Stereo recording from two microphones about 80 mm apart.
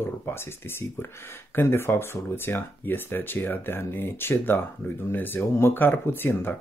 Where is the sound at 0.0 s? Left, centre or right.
Left.